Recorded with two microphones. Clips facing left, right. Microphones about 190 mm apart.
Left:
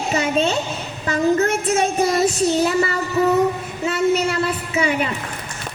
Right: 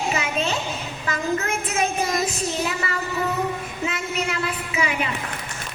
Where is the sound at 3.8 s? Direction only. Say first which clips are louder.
Left 9 dB; 40° left (ahead or behind).